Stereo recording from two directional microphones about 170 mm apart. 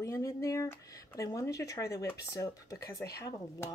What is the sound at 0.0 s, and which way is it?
Speech, 20° left (ahead or behind).